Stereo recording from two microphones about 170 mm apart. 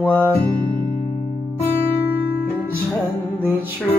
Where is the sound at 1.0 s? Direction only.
55° left (ahead or behind).